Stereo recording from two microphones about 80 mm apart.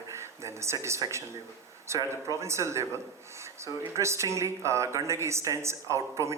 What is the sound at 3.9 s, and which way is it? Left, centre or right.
Speech, right.